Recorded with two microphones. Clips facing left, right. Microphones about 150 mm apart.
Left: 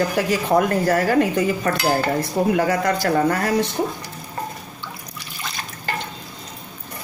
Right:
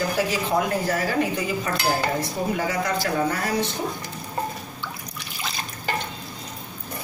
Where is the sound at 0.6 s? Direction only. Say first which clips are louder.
Left 6 dB; 55° left (ahead or behind).